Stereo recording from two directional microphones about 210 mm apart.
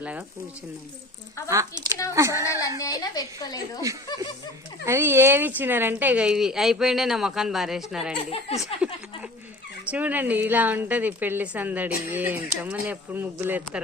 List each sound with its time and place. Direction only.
0.0 s a woman's voice: 5° right (ahead or behind)
1.5 s a woman's voice: 15° right (ahead or behind)
2.4 s a woman's voice: 15° left (ahead or behind)
3.9 s a woman's voice: 15° right (ahead or behind)
8.3 s speech: 25° left (ahead or behind)
9.9 s a woman's voice: 10° right (ahead or behind)